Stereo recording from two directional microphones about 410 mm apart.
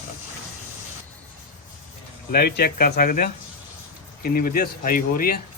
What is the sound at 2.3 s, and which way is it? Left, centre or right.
Speech, left.